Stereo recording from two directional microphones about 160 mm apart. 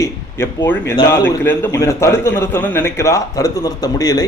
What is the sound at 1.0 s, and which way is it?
A man's voice, 15° left (ahead or behind).